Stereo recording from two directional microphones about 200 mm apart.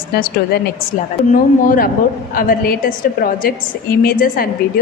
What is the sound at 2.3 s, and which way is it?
A woman's voice, 45° left (ahead or behind).